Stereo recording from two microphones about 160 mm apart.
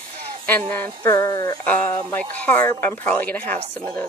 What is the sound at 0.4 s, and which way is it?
Speech, 10° left (ahead or behind).